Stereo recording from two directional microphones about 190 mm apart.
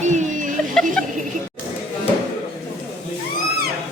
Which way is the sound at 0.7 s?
5° left (ahead or behind).